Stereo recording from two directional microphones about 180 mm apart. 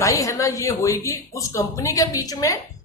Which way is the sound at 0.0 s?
15° left (ahead or behind).